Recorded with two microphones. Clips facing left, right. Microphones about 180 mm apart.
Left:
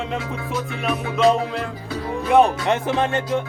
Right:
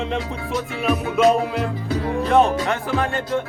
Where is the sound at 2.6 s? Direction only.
20° left (ahead or behind).